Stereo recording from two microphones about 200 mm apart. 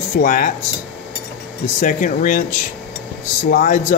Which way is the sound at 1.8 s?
40° left (ahead or behind).